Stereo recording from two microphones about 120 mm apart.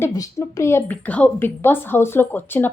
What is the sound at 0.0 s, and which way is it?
A woman's voice, 25° left (ahead or behind).